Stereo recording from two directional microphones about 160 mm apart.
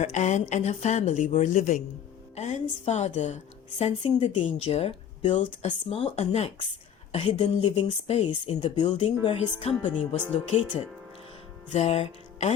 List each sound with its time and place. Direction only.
0.0 s a woman's voice: 45° left (ahead or behind)
11.7 s music: 40° left (ahead or behind)